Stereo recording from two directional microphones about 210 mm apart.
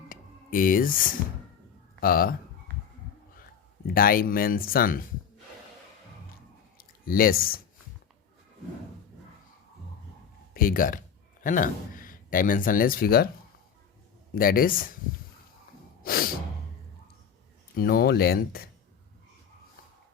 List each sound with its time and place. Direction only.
0.1 s a sound: 40° left (ahead or behind)
2.0 s speech: 45° left (ahead or behind)
3.8 s speech: 45° left (ahead or behind)
6.7 s speech: 45° left (ahead or behind)
10.5 s speech: 45° left (ahead or behind)
14.3 s speech: 45° left (ahead or behind)
16.0 s gasp: 45° left (ahead or behind)
17.7 s speech: 45° left (ahead or behind)